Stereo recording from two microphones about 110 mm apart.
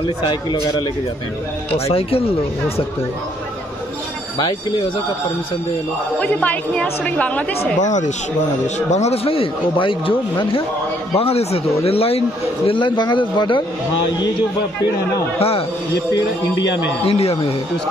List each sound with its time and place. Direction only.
1.9 s a man's voice: 60° left (ahead or behind)
6.1 s a woman's voice: 10° left (ahead or behind)
7.8 s a man's voice: 90° left; by 10.6 s 50° left (ahead or behind)
11.1 s a man's voice: 65° left (ahead or behind)
12.6 s a man's voice: 50° left (ahead or behind)
15.3 s a man's voice: 65° left (ahead or behind)
17.0 s a man's voice: 65° left (ahead or behind)